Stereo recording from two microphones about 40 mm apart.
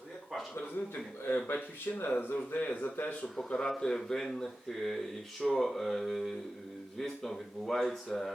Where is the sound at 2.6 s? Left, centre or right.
Left.